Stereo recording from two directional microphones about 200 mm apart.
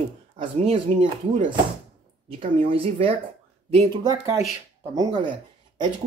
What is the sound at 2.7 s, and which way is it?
Speech, 25° right (ahead or behind).